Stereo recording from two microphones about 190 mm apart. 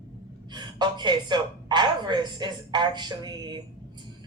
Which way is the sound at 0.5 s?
25° right (ahead or behind).